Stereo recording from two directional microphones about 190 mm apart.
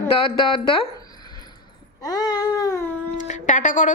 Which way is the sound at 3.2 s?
40° left (ahead or behind).